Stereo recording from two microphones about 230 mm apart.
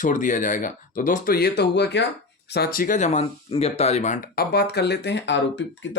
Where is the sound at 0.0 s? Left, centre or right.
Left.